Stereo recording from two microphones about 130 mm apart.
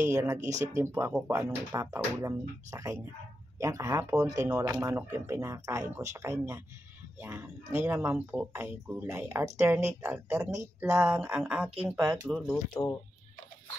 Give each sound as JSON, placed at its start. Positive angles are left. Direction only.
{"t": 0.0, "sound": "speech", "side_deg": -25}
{"t": 1.1, "sound": "speech", "side_deg": -10}
{"t": 1.4, "sound": "speech", "side_deg": -25}
{"t": 12.8, "sound": "speech", "side_deg": 25}